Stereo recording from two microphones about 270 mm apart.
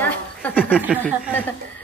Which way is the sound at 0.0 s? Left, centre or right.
Centre.